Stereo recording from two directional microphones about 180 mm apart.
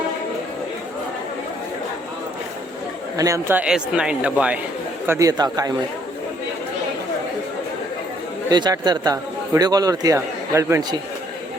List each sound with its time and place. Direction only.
3.2 s a man's voice: 15° right (ahead or behind)
8.4 s a man's voice: 20° right (ahead or behind)